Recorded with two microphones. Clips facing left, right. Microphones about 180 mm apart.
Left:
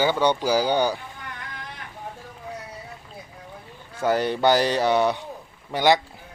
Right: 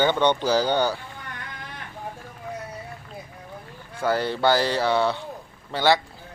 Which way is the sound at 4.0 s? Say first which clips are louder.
Left 2 dB; 20° left (ahead or behind).